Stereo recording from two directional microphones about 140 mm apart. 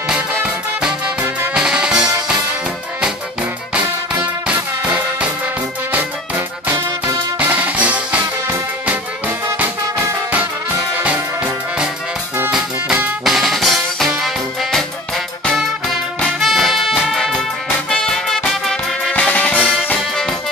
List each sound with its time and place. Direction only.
0.1 s music: 5° right (ahead or behind)
3.7 s music: 10° right (ahead or behind)
7.3 s music: 10° right (ahead or behind)
9.5 s music: 20° right (ahead or behind)
11.0 s music: 10° right (ahead or behind)
16.2 s music: centre (ahead or behind)